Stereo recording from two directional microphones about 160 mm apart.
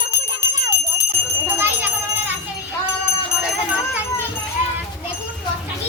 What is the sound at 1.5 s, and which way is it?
Jingle bell, 10° right (ahead or behind).